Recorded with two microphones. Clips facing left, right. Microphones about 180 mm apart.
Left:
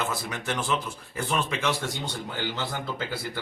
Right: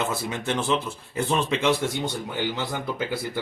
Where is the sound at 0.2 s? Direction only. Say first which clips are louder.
Right 4 dB; 25° right (ahead or behind).